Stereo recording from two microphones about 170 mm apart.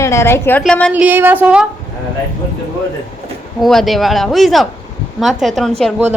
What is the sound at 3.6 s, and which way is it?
Speech, centre (ahead or behind).